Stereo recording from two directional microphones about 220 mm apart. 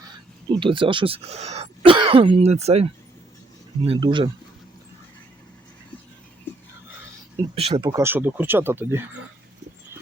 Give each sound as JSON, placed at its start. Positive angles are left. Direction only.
{"t": 0.6, "sound": "speech", "side_deg": -20}
{"t": 3.8, "sound": "speech", "side_deg": -20}
{"t": 7.5, "sound": "speech", "side_deg": -25}